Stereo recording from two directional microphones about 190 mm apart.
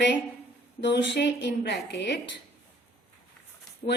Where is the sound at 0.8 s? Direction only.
65° left (ahead or behind).